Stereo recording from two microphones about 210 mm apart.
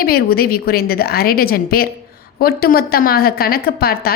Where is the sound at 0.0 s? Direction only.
45° left (ahead or behind).